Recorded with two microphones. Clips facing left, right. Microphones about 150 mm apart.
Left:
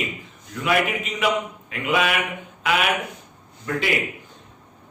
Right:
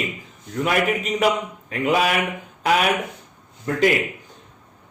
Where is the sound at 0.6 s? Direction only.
40° right (ahead or behind).